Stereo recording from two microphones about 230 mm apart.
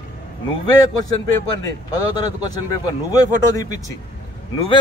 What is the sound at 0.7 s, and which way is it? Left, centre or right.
A man's voice, centre.